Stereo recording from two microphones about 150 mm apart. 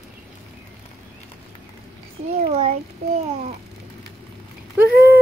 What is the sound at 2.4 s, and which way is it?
Speech, 45° right (ahead or behind).